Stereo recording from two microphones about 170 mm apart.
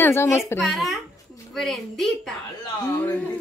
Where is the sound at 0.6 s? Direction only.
Centre (ahead or behind).